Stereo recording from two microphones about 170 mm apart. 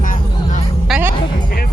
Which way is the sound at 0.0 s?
50° left (ahead or behind).